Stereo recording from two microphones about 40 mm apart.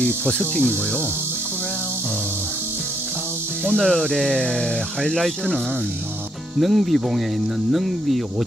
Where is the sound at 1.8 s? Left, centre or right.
Right.